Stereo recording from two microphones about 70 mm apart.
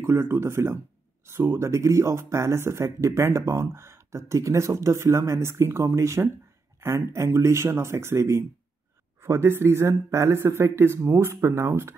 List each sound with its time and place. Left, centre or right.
0.0 s speech: right